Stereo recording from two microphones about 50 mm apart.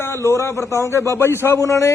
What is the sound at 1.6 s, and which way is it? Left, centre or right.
Speech, left.